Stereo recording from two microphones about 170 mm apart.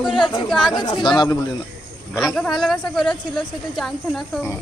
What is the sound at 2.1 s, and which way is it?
A woman's voice, 5° left (ahead or behind).